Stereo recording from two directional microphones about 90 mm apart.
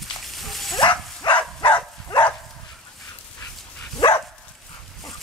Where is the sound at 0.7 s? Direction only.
60° left (ahead or behind).